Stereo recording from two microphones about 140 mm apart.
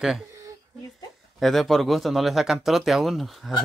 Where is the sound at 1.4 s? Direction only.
Centre (ahead or behind).